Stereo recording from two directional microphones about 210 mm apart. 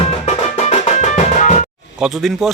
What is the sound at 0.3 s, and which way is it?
Music, 30° left (ahead or behind).